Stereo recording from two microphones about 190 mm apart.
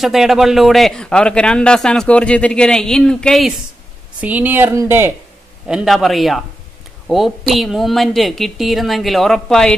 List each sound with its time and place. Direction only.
0.0 s a man's voice: centre (ahead or behind)